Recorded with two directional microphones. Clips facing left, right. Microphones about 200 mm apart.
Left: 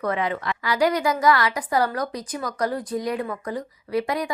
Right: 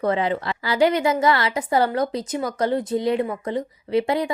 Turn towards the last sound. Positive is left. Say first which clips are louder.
# right 4 dB
turn(degrees=-25)  # may be behind; listen again after turning